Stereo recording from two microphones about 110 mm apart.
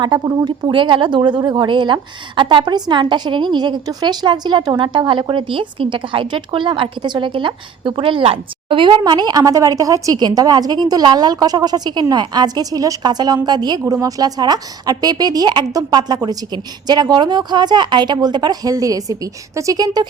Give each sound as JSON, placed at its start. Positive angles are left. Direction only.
{"t": 0.4, "sound": "a woman's voice", "side_deg": -45}